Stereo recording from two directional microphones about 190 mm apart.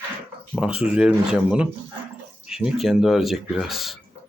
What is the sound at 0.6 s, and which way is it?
Speech, 5° right (ahead or behind).